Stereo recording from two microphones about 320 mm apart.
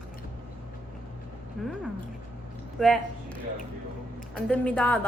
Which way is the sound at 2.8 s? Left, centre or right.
Centre.